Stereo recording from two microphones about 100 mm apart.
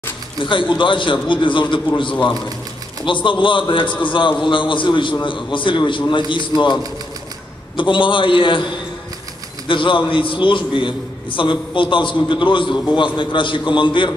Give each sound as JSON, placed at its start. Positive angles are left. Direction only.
{"t": 0.4, "sound": "a man's voice", "side_deg": 55}
{"t": 3.1, "sound": "a man's voice", "side_deg": 55}